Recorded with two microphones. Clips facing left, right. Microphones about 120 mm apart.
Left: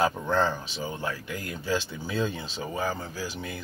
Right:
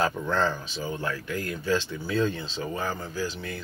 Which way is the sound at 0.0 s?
15° left (ahead or behind).